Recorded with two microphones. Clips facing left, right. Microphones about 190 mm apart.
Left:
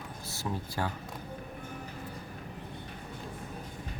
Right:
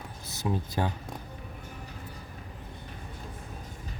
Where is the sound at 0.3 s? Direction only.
20° right (ahead or behind).